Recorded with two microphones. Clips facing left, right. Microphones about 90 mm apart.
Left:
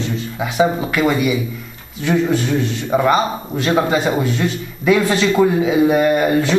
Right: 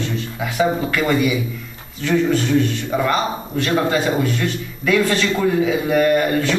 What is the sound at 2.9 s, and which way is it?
A man's voice, 20° left (ahead or behind).